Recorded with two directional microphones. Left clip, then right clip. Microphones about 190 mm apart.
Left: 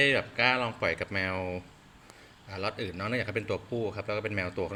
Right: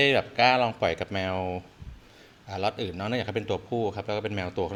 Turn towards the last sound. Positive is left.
turn(degrees=-20)  # may be behind; listen again after turning